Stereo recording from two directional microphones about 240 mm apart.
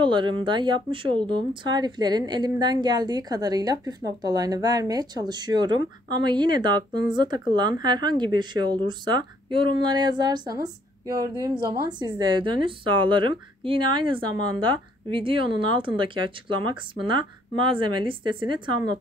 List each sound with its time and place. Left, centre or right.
0.0 s a woman's voice: centre